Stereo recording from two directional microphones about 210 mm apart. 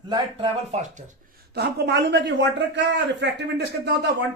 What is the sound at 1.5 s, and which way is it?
A man's voice, 50° right (ahead or behind).